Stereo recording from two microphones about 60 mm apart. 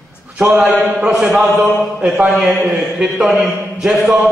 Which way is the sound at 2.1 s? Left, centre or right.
Right.